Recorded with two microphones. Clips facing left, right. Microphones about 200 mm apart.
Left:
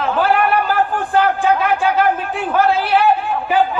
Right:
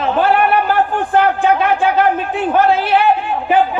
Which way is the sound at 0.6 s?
20° right (ahead or behind).